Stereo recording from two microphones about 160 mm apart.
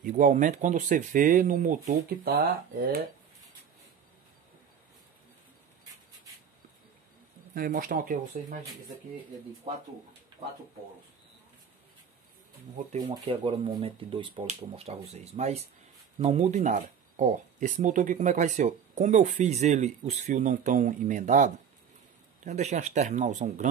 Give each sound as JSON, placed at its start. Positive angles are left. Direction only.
{"t": 0.0, "sound": "speech", "side_deg": -55}
{"t": 7.5, "sound": "speech", "side_deg": -65}
{"t": 13.0, "sound": "speech", "side_deg": -30}